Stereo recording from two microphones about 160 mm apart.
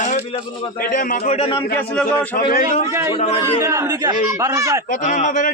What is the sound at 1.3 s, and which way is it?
Speech, 35° left (ahead or behind).